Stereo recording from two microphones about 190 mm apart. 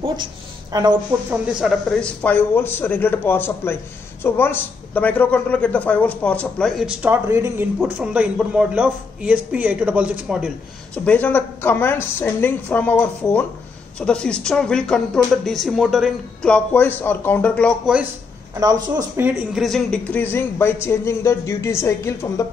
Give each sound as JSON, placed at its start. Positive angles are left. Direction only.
{"t": 0.7, "sound": "speech", "side_deg": -20}
{"t": 1.3, "sound": "speech", "side_deg": -5}
{"t": 11.1, "sound": "speech", "side_deg": 10}
{"t": 18.9, "sound": "speech", "side_deg": -10}
{"t": 19.5, "sound": "speech", "side_deg": 0}